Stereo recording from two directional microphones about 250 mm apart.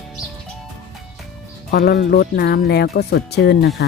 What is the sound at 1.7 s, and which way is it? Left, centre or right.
Speech, left.